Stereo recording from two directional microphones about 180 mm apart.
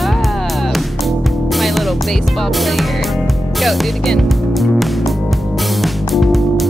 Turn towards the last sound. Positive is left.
turn(degrees=0)  # may be behind; listen again after turning